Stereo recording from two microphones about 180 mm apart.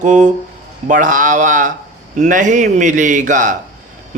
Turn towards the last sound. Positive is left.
turn(degrees=-45)  # may be behind; listen again after turning